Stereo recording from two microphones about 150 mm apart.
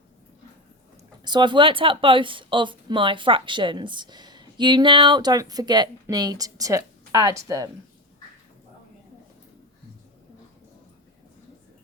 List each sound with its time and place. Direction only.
1.2 s speech: 30° right (ahead or behind)